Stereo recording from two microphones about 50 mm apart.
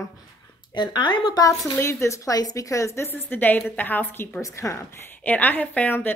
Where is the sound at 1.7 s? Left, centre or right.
Left.